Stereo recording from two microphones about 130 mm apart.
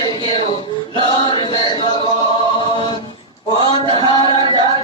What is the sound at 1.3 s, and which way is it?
Chant, 40° left (ahead or behind).